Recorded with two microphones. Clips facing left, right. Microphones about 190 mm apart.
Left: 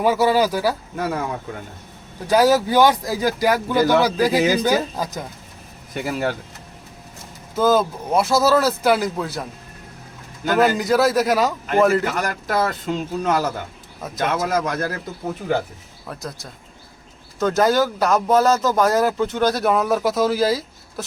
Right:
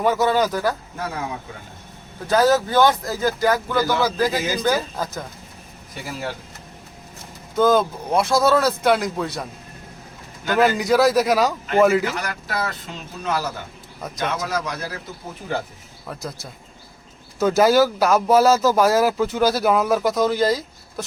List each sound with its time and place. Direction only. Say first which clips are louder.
0.0 s speech: left 2 dB; 10° left (ahead or behind)
2.2 s speech: left 1 dB; 10° left (ahead or behind)
5.9 s speech: left 7 dB; 65° left (ahead or behind)
7.5 s speech: even; 5° left (ahead or behind)
10.5 s speech: even; centre (ahead or behind)
12.1 s speech: left 5 dB; 45° left (ahead or behind)
16.0 s speech: even; centre (ahead or behind)